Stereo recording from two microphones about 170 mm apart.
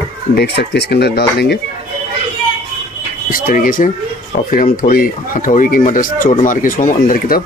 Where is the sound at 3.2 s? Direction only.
55° left (ahead or behind).